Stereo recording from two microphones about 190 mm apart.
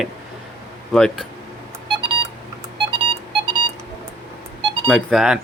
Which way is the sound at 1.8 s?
30° right (ahead or behind).